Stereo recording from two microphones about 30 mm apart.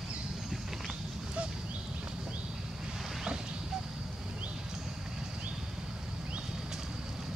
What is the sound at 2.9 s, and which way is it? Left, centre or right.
Boat, centre.